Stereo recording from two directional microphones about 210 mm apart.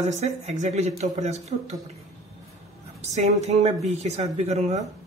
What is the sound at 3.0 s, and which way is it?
Speech, 30° right (ahead or behind).